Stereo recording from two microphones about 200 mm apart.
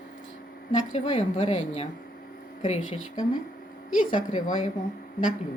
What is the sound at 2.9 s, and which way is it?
A woman's voice, 40° left (ahead or behind).